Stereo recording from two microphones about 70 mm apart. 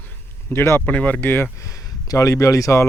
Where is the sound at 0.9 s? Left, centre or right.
Left.